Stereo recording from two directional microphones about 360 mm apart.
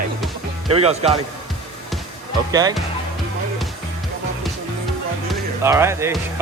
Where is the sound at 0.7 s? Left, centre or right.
Centre.